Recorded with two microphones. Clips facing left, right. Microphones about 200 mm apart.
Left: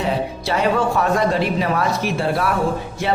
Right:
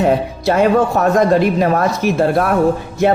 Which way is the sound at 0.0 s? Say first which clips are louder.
Right 7 dB; 50° right (ahead or behind).